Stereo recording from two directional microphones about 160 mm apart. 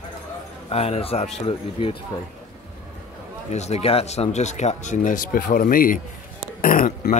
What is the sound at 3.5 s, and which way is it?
Speech, 45° left (ahead or behind).